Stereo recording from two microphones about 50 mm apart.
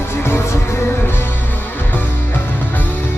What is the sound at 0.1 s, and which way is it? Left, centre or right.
Music, left.